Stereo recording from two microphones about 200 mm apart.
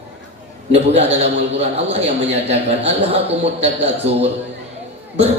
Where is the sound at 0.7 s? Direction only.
30° right (ahead or behind).